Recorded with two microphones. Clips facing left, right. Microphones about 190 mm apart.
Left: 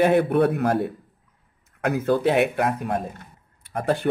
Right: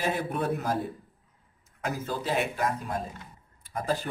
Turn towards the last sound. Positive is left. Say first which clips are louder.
# left 7 dB
turn(degrees=65)  # may be behind; listen again after turning